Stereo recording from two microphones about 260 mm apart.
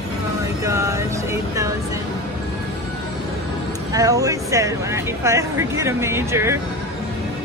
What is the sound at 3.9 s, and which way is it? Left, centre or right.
Speech, centre.